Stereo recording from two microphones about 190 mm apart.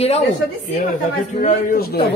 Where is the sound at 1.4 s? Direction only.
50° left (ahead or behind).